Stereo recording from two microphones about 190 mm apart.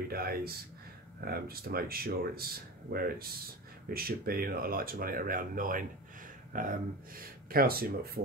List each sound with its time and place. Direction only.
0.1 s speech: 55° right (ahead or behind)